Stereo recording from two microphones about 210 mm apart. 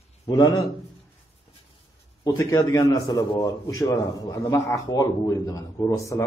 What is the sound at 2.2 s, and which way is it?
A man's voice, 15° left (ahead or behind).